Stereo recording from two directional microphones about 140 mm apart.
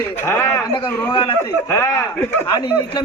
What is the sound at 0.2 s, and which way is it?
Speech, 15° left (ahead or behind).